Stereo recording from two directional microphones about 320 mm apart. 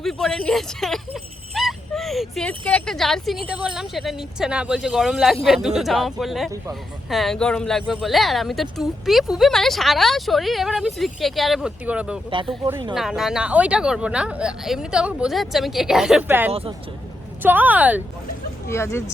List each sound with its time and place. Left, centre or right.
0.0 s speech: centre
16.5 s speech: centre
17.4 s speech: centre
18.7 s speech: centre